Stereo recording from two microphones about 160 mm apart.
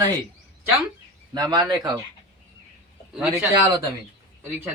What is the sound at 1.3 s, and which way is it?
Speech, 25° right (ahead or behind).